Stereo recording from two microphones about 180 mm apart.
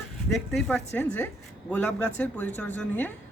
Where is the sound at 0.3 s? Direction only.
Centre (ahead or behind).